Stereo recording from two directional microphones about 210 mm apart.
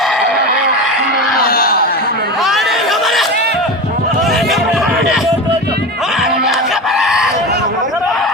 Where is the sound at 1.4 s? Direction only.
45° left (ahead or behind).